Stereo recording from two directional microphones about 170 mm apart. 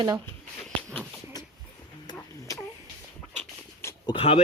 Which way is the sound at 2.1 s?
15° left (ahead or behind).